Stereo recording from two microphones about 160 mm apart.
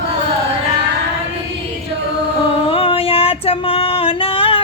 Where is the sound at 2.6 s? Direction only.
35° left (ahead or behind).